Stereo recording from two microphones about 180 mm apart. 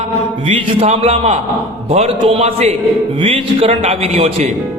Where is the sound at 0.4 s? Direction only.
35° right (ahead or behind).